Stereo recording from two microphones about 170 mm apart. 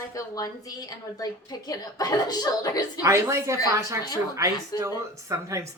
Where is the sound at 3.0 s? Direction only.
15° right (ahead or behind).